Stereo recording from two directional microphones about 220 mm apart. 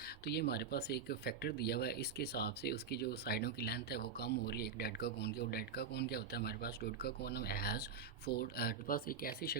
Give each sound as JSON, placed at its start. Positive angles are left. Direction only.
{"t": 0.3, "sound": "speech", "side_deg": 50}